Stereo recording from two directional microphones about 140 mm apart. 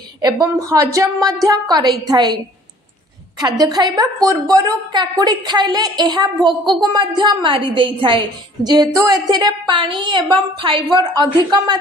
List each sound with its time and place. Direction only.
0.2 s a woman's voice: 25° right (ahead or behind)